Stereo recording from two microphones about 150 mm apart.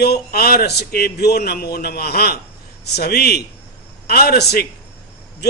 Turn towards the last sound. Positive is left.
turn(degrees=90)